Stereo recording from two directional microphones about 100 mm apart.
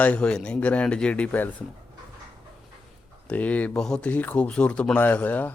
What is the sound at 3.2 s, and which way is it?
Speech, 15° left (ahead or behind).